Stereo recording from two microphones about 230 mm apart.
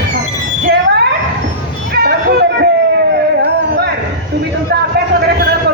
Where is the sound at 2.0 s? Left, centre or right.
Right.